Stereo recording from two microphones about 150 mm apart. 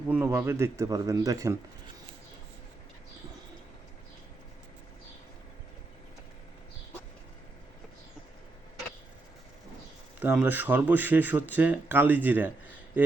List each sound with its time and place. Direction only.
0.1 s speech: 15° right (ahead or behind)
10.2 s speech: 10° right (ahead or behind)